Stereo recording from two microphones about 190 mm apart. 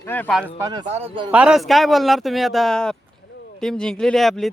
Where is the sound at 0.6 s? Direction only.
20° right (ahead or behind).